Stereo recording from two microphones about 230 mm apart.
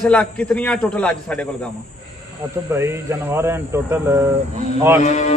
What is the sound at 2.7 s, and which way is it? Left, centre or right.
Speech, centre.